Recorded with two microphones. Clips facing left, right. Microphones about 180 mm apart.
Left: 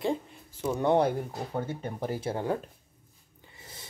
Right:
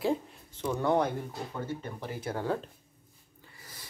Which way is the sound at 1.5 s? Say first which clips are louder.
Left 5 dB; 45° left (ahead or behind).